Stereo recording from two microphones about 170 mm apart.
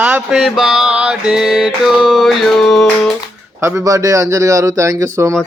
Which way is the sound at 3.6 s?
20° right (ahead or behind).